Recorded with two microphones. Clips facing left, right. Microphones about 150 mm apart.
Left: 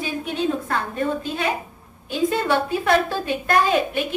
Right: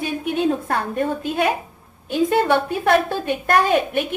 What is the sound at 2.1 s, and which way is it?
A woman's voice, 60° right (ahead or behind).